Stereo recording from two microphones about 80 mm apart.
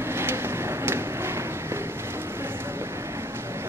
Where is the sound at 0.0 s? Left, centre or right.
Right.